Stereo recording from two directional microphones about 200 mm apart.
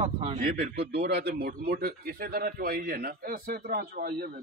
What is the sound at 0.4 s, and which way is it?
A man's voice, 45° right (ahead or behind).